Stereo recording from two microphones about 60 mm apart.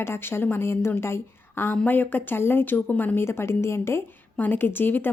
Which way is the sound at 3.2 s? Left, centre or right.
Left.